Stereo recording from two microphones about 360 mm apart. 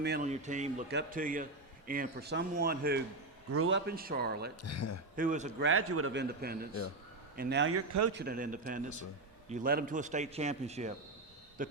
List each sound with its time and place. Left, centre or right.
0.0 s a man's voice: right
4.6 s speech: left
5.1 s a man's voice: right
5.6 s speech: right
6.2 s a man's voice: right
8.1 s a man's voice: right